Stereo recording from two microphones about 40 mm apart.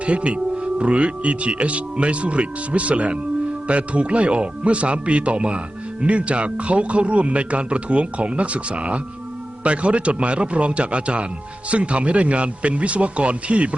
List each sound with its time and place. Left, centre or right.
0.0 s speech: right